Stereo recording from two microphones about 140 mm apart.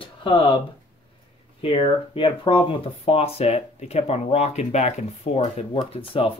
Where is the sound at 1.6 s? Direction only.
40° left (ahead or behind).